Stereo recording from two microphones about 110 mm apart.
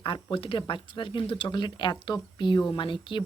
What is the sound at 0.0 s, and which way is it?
Speech, 50° left (ahead or behind).